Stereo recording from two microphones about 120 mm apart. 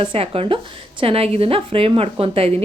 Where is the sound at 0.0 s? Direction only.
50° right (ahead or behind).